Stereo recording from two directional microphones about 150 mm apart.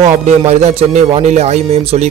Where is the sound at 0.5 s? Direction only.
50° right (ahead or behind).